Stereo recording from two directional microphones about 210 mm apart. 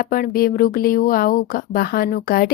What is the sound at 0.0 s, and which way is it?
Speech, 45° left (ahead or behind).